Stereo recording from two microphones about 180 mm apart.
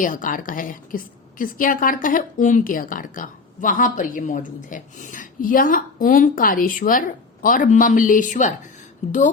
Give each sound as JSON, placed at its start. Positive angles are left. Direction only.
{"t": 0.0, "sound": "a woman's voice", "side_deg": 50}